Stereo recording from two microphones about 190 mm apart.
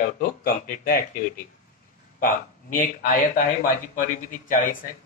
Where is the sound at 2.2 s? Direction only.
45° left (ahead or behind).